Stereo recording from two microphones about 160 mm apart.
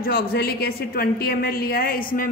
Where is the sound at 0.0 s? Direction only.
70° left (ahead or behind).